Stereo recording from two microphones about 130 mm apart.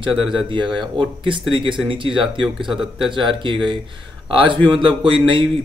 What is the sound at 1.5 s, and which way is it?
Speech, 40° right (ahead or behind).